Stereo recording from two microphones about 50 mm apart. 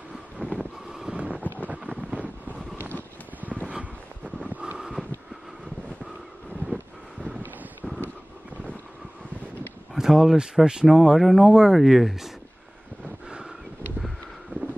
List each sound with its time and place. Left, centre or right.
0.4 s vehicle: left
1.1 s vehicle: right
4.5 s vehicle: right
9.9 s speech: centre